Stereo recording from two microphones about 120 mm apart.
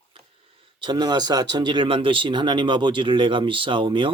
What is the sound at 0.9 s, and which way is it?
Speech, 35° right (ahead or behind).